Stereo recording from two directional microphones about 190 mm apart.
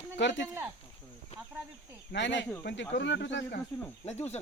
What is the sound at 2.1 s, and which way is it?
Speech, 70° left (ahead or behind).